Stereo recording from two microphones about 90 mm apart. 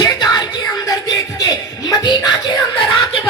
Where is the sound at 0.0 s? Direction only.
45° left (ahead or behind).